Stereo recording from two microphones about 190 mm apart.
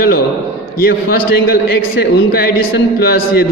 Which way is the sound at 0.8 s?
55° left (ahead or behind).